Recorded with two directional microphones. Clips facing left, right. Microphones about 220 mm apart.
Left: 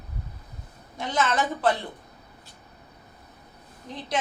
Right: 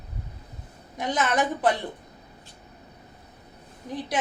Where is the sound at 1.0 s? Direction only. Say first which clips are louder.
Right 1 dB; 15° right (ahead or behind).